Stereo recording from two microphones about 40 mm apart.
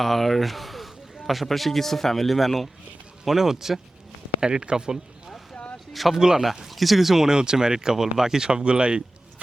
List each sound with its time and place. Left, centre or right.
0.0 s speech: centre
4.4 s speech: centre
5.9 s speech: centre
6.1 s speech: centre
6.7 s speech: centre
7.3 s speech: centre